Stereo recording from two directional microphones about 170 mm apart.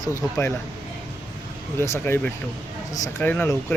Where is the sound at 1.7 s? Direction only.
15° left (ahead or behind).